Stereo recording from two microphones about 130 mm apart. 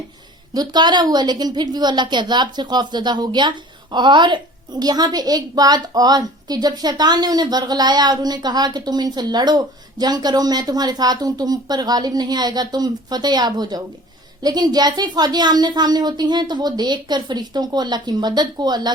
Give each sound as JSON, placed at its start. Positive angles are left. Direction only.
{"t": 0.5, "sound": "a woman's voice", "side_deg": -30}